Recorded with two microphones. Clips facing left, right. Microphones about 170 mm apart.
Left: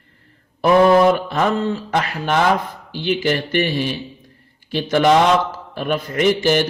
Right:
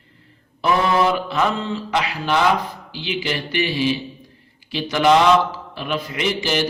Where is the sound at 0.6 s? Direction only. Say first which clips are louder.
Left 6 dB; 50° left (ahead or behind).